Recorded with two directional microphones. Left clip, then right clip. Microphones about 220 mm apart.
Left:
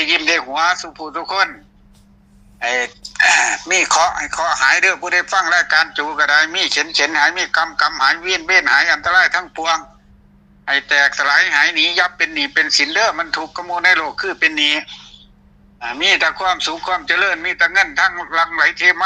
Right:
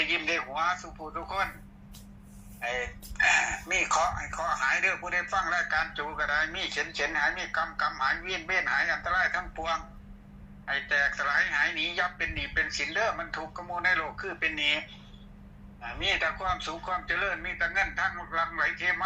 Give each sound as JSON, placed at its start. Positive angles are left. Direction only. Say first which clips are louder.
{"t": 0.0, "sound": "a man's voice", "louder": "left 13 dB", "side_deg": 55}
{"t": 2.6, "sound": "speech", "louder": "left 14 dB", "side_deg": 55}